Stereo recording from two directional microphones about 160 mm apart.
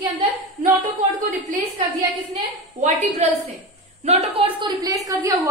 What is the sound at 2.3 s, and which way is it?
A woman's voice, 45° right (ahead or behind).